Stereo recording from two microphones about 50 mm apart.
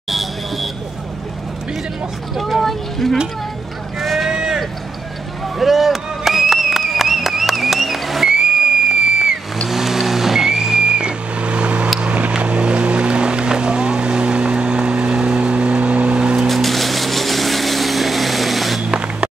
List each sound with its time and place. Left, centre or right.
0.1 s vehicle: centre
2.3 s speech: centre
4.0 s a sound: centre
4.3 s a sound: centre
9.7 s vehicle: centre; by 11.9 s right
12.0 s music: right
16.4 s vehicle: centre
18.8 s music: centre